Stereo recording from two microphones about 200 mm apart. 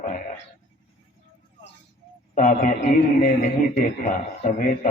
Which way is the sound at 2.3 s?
40° left (ahead or behind).